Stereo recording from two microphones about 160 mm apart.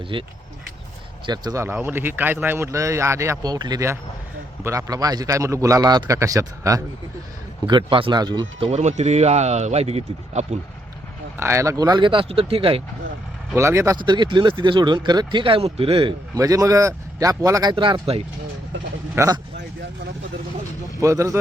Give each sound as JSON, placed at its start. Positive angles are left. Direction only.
{"t": 0.1, "sound": "speech", "side_deg": -30}
{"t": 1.3, "sound": "speech", "side_deg": -20}
{"t": 7.7, "sound": "speech", "side_deg": -30}
{"t": 8.7, "sound": "speech", "side_deg": -45}
{"t": 11.3, "sound": "speech", "side_deg": -15}
{"t": 13.6, "sound": "speech", "side_deg": -15}
{"t": 14.0, "sound": "speech", "side_deg": -30}
{"t": 19.1, "sound": "speech", "side_deg": -20}
{"t": 21.0, "sound": "speech", "side_deg": -20}